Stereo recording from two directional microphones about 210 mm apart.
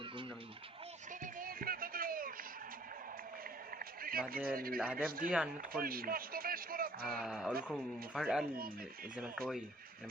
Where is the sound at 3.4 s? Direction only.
45° right (ahead or behind).